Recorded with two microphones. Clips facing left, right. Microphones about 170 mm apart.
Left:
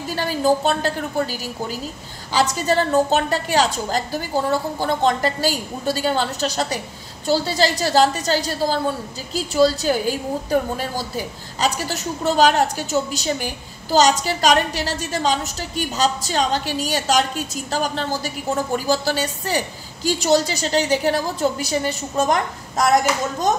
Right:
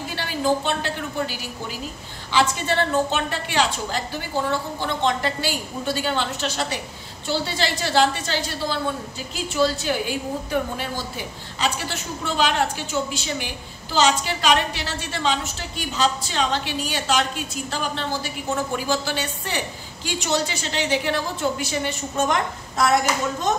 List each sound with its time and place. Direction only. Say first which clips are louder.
0.1 s a woman's voice: left 4 dB; 40° left (ahead or behind)